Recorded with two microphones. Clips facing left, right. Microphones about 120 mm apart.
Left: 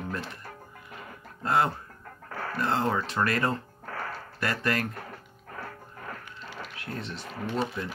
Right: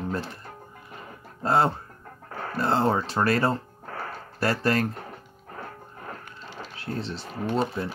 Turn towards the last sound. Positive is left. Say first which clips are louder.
# right 4 dB
turn(degrees=-35)  # may be behind; listen again after turning